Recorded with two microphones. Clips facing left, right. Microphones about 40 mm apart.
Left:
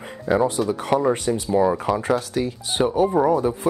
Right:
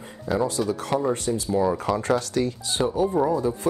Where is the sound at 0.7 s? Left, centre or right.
Left.